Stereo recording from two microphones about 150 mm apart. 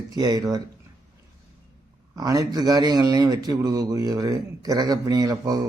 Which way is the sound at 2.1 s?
25° right (ahead or behind).